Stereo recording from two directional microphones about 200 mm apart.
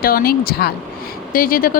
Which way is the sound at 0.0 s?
45° left (ahead or behind).